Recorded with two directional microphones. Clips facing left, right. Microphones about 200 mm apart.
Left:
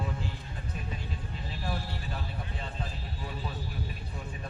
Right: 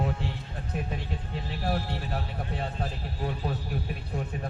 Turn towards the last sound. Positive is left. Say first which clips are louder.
# right 7 dB
turn(degrees=-60)  # may be behind; listen again after turning